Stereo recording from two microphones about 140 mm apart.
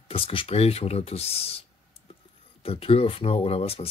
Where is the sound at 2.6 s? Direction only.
40° left (ahead or behind).